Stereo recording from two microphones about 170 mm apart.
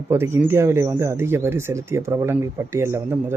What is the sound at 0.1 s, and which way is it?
Speech, 15° right (ahead or behind).